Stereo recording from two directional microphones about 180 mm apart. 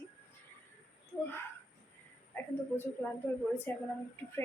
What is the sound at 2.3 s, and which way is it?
A woman's voice, 10° left (ahead or behind).